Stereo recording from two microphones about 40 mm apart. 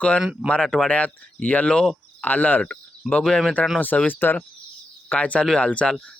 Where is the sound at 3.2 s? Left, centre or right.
Centre.